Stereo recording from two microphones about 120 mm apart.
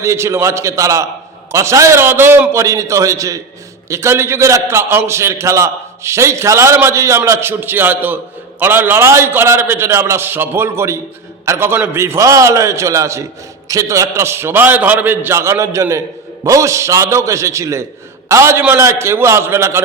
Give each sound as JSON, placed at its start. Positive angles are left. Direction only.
{"t": 0.0, "sound": "a man's voice", "side_deg": -25}